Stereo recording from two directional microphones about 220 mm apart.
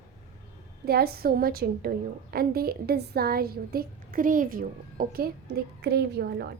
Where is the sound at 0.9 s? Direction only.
45° right (ahead or behind).